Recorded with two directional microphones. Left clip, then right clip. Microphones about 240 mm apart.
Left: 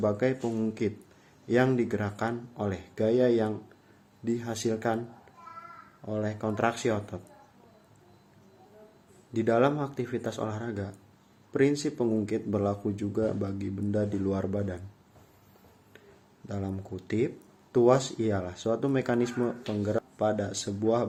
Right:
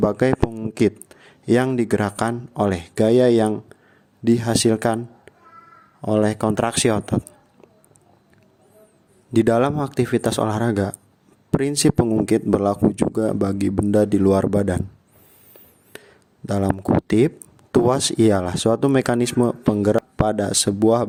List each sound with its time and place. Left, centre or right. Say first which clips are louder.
0.0 s speech: right 9 dB; right
9.3 s speech: right 7 dB; right
16.5 s speech: right 17 dB; right